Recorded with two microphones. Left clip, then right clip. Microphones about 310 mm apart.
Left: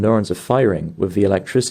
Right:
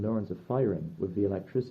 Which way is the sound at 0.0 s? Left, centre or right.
Left.